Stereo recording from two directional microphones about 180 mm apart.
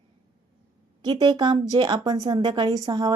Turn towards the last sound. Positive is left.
turn(degrees=-20)  # may be behind; listen again after turning